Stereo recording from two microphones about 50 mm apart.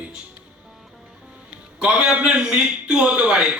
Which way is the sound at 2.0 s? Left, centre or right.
Right.